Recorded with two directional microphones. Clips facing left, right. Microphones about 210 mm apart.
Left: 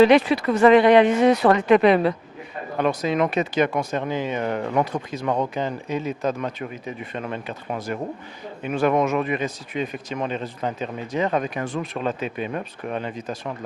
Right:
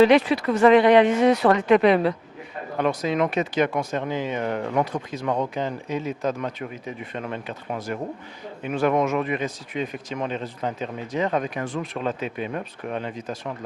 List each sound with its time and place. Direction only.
0.0 s speech: 10° left (ahead or behind)
3.7 s speech: 25° left (ahead or behind)
4.1 s speech: 15° left (ahead or behind)